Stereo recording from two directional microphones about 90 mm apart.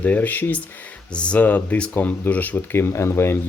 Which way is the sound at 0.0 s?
15° left (ahead or behind).